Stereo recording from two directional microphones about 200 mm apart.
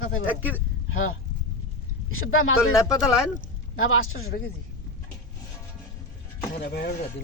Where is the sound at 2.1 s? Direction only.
90° left.